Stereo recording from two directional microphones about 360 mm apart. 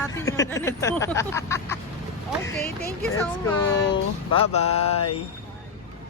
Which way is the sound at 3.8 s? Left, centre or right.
Centre.